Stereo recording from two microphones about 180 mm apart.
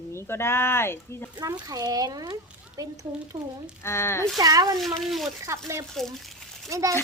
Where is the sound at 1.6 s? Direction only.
20° right (ahead or behind).